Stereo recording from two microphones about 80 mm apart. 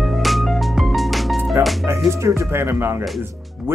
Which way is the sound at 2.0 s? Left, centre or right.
Right.